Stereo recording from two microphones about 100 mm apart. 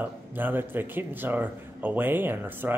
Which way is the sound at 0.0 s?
20° right (ahead or behind).